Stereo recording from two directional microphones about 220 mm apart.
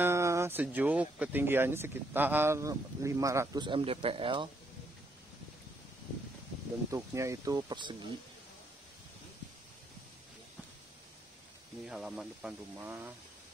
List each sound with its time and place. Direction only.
0.0 s speech: 10° right (ahead or behind)
6.9 s speech: 15° right (ahead or behind)
11.8 s speech: centre (ahead or behind)